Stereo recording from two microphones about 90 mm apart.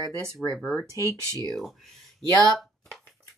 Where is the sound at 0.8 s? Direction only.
35° right (ahead or behind).